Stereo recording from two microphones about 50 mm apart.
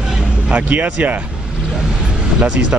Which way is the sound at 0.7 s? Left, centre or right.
Right.